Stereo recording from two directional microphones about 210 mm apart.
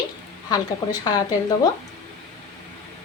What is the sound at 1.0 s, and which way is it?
Speech, 20° left (ahead or behind).